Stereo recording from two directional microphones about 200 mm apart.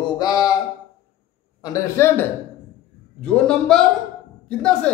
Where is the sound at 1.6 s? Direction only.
15° left (ahead or behind).